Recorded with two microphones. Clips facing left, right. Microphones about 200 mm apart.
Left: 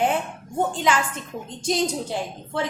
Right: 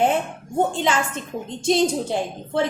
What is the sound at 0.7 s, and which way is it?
A woman's voice, 25° right (ahead or behind).